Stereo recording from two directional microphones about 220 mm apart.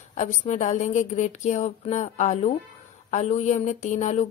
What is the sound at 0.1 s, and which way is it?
A woman's voice, 35° left (ahead or behind).